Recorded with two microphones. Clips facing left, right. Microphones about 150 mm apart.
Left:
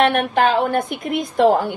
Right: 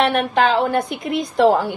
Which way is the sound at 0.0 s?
50° left (ahead or behind).